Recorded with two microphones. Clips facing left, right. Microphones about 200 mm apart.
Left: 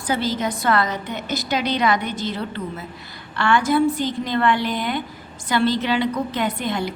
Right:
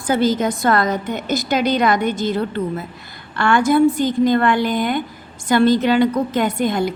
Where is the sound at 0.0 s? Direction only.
50° right (ahead or behind).